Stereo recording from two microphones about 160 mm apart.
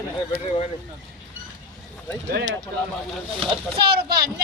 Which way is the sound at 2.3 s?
75° right (ahead or behind).